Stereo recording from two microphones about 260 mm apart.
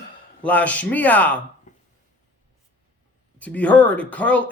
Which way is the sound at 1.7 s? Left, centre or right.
Left.